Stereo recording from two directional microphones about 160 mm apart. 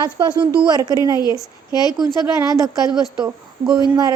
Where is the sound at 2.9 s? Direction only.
5° right (ahead or behind).